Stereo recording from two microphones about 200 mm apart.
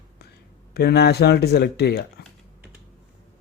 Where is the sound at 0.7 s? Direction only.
55° left (ahead or behind).